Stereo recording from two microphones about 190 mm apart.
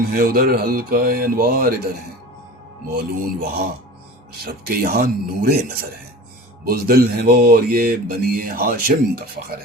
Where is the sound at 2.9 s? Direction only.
50° right (ahead or behind).